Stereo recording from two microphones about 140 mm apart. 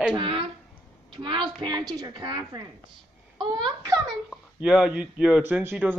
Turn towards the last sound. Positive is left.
turn(degrees=-10)  # may be behind; listen again after turning